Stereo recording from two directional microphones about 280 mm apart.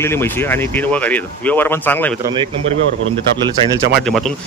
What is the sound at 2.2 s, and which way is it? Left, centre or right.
Speech, centre.